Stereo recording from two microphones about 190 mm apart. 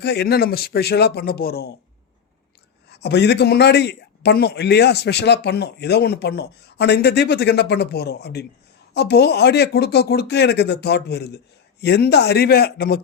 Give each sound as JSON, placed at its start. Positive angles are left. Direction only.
{"t": 0.0, "sound": "a man's voice", "side_deg": 60}
{"t": 2.9, "sound": "a man's voice", "side_deg": 65}